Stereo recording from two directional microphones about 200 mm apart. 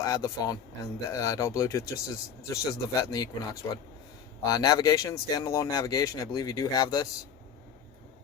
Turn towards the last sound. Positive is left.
turn(degrees=20)  # may be behind; listen again after turning